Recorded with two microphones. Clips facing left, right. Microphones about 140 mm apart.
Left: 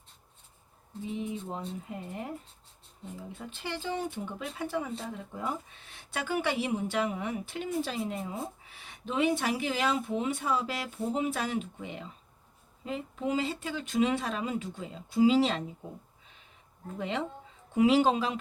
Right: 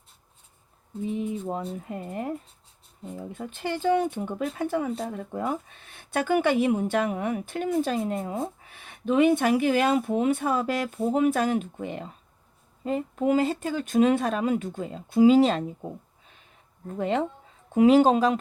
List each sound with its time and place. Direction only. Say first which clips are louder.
1.2 s speech: right 6 dB; 55° right (ahead or behind)
3.2 s speech: right 8 dB; 55° right (ahead or behind)
17.0 s speech: right 7 dB; 50° right (ahead or behind)